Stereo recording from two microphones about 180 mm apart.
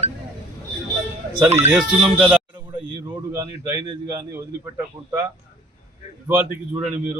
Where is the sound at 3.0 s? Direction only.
15° right (ahead or behind).